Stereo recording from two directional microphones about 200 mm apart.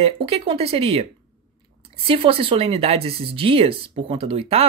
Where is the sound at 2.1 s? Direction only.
30° right (ahead or behind).